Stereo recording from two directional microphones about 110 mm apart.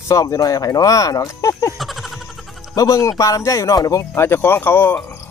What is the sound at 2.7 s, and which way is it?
Speech, 30° left (ahead or behind).